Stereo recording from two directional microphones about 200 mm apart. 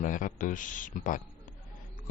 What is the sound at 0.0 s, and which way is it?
A man's voice, 40° left (ahead or behind).